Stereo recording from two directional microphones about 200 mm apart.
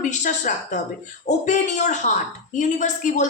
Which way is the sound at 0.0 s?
40° left (ahead or behind).